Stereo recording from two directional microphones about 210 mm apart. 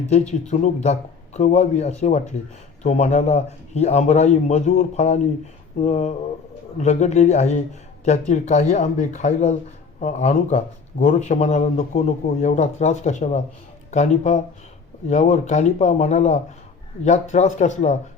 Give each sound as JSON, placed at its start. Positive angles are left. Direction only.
{"t": 0.1, "sound": "a man's voice", "side_deg": 35}